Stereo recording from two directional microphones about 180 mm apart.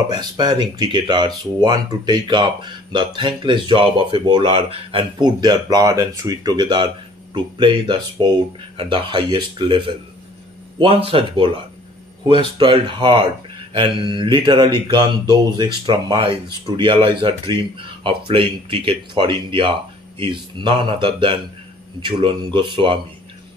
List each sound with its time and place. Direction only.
0.1 s speech: 25° right (ahead or behind)